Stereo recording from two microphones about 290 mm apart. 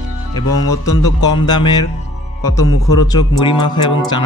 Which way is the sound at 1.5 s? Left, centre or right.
Centre.